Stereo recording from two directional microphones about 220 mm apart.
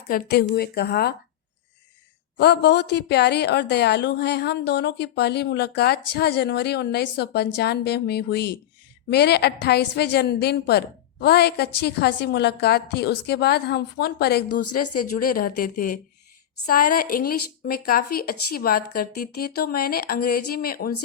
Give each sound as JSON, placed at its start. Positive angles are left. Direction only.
{"t": 0.1, "sound": "a woman's voice", "side_deg": 45}
{"t": 2.4, "sound": "a woman's voice", "side_deg": 50}
{"t": 14.5, "sound": "speech", "side_deg": 90}
{"t": 14.9, "sound": "a woman's voice", "side_deg": 40}